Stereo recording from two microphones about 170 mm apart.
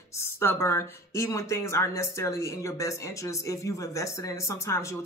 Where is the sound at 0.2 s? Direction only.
15° left (ahead or behind).